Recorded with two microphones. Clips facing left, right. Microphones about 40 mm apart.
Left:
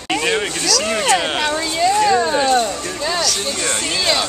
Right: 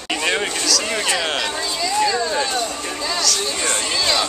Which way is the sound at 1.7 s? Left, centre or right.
Left.